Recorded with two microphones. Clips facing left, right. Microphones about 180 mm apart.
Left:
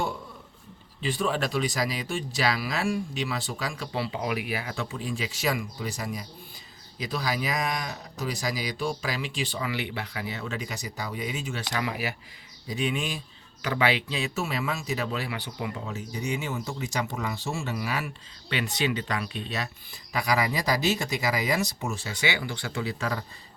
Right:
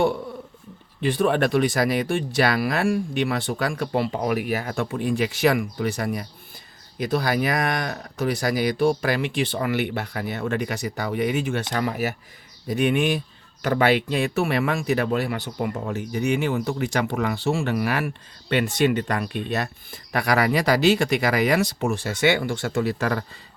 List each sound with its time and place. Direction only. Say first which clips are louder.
1.0 s speech: right 7 dB; 55° right (ahead or behind)
11.7 s speech: right 2 dB; 45° right (ahead or behind)
12.6 s speech: right 8 dB; 55° right (ahead or behind)